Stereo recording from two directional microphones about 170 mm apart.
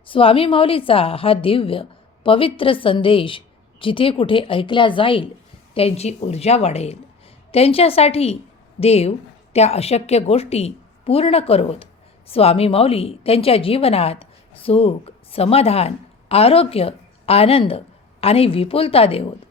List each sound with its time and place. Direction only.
0.0 s a woman's voice: 30° left (ahead or behind)